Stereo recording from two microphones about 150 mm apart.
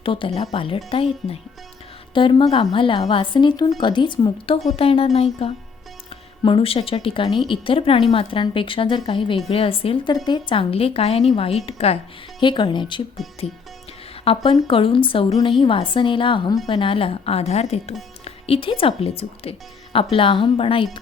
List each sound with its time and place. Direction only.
0.0 s a woman's voice: 35° left (ahead or behind)
12.4 s a woman's voice: 30° left (ahead or behind)
13.2 s music: centre (ahead or behind)
14.3 s a woman's voice: 40° left (ahead or behind)